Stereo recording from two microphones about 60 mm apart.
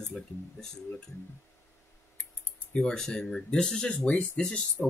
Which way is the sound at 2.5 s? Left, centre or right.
Centre.